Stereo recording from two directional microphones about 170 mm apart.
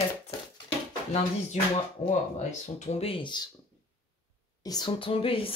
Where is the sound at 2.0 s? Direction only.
45° left (ahead or behind).